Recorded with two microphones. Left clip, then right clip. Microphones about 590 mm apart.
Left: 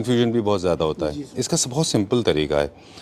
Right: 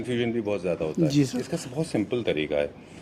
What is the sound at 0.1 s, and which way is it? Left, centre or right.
A man's voice, left.